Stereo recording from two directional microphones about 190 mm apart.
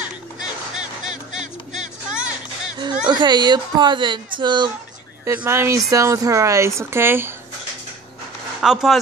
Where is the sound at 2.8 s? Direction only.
25° right (ahead or behind).